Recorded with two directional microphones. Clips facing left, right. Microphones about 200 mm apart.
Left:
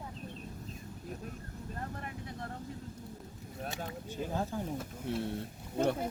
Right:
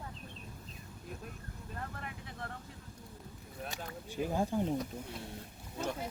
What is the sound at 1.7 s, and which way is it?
Vehicle, 40° left (ahead or behind).